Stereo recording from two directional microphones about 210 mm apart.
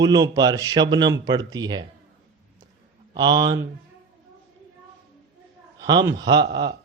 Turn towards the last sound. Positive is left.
turn(degrees=-20)  # may be behind; listen again after turning